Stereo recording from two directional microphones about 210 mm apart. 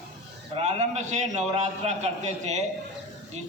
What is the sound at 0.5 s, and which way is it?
A man's voice, 35° right (ahead or behind).